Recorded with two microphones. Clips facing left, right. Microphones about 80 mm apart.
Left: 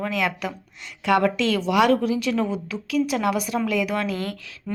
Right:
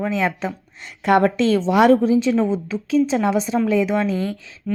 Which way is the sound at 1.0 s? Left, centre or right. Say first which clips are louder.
Right 4 dB; right.